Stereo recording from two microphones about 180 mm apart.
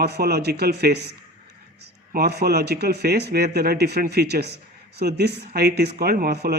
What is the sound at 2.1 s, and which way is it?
Speech, 65° right (ahead or behind).